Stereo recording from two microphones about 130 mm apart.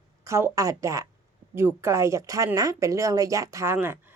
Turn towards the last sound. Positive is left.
turn(degrees=-15)  # may be behind; listen again after turning